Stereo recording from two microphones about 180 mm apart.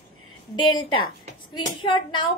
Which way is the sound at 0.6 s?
25° left (ahead or behind).